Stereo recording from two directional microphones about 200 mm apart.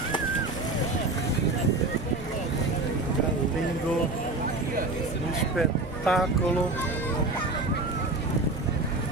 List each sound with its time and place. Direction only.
5.6 s speech: centre (ahead or behind)